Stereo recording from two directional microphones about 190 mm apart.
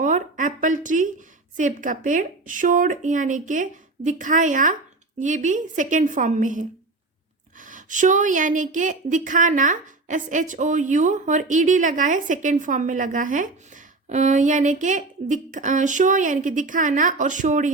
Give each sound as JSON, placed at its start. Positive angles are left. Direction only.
{"t": 0.0, "sound": "a woman's voice", "side_deg": -45}